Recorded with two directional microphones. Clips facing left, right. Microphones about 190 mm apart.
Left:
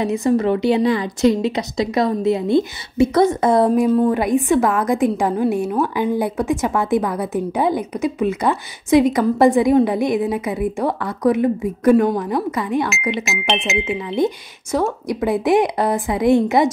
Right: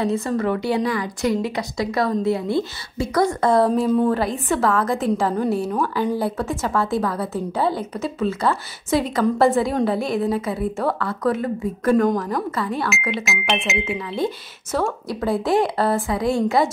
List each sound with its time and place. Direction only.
0.0 s a woman's voice: 15° left (ahead or behind)
13.1 s speech: centre (ahead or behind)
14.7 s a woman's voice: 15° left (ahead or behind)